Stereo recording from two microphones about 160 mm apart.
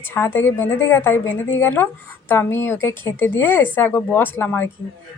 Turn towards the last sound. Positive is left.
turn(degrees=15)  # may be behind; listen again after turning